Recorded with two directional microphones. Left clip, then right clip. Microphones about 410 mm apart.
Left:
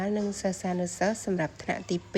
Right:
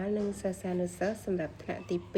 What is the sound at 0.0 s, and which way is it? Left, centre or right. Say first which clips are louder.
A woman's voice: left 3 dB; centre.